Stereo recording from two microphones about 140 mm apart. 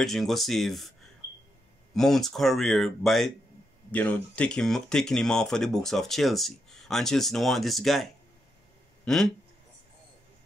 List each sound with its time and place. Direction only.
0.0 s speech: centre (ahead or behind)
2.0 s speech: 5° left (ahead or behind)